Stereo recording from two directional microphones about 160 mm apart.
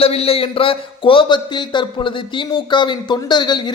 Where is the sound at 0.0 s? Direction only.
40° left (ahead or behind).